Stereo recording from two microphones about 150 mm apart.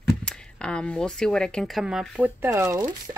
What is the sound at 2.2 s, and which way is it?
Speech, 15° right (ahead or behind).